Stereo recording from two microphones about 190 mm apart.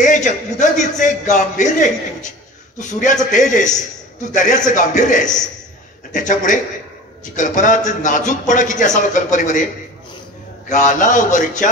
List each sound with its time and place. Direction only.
0.0 s a man's voice: 40° left (ahead or behind)
10.7 s speech: 40° left (ahead or behind)